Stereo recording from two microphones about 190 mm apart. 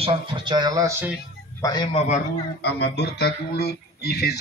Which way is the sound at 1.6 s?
25° left (ahead or behind).